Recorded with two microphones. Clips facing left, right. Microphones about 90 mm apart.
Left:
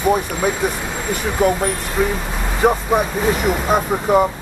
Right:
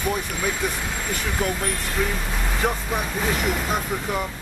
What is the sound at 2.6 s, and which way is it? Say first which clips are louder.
Speech: left 11 dB; 30° left (ahead or behind).